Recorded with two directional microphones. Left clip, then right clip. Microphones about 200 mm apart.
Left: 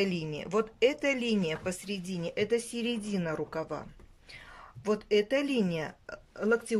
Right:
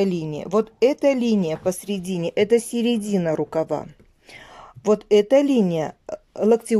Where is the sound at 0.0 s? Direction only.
25° right (ahead or behind).